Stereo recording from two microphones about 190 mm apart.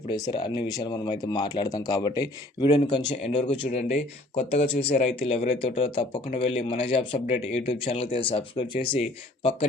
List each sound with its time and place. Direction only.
0.1 s speech: 25° left (ahead or behind)
3.7 s speech: 35° left (ahead or behind)
5.4 s speech: 40° left (ahead or behind)
5.8 s speech: 25° left (ahead or behind)